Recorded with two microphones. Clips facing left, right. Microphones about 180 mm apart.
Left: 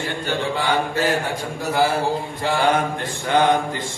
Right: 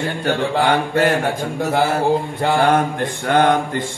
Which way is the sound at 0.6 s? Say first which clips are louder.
Right 5 dB; 65° right (ahead or behind).